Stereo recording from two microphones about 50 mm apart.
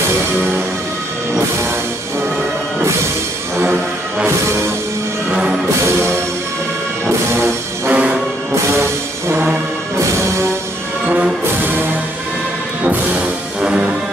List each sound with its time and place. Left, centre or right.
3.5 s music: right
7.9 s music: right
13.6 s music: centre